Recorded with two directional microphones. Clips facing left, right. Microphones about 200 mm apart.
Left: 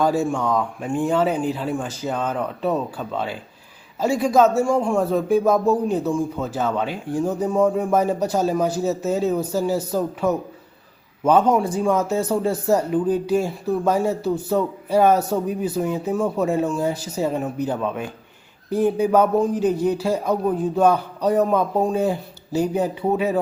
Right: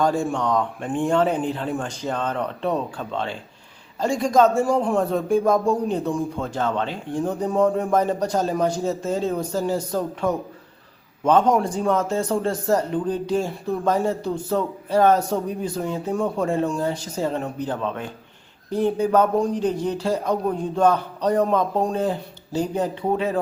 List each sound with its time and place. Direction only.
0.0 s a man's voice: 5° left (ahead or behind)